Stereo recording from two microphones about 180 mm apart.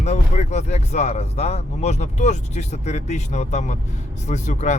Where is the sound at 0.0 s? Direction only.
40° left (ahead or behind).